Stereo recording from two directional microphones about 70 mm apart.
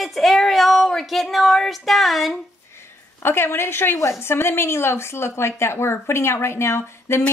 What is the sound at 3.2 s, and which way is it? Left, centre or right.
Speech, left.